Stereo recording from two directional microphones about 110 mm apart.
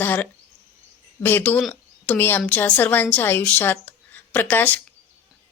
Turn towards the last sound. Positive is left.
turn(degrees=15)  # may be behind; listen again after turning